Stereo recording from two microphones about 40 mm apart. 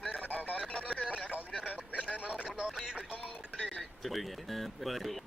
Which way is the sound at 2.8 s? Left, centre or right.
Centre.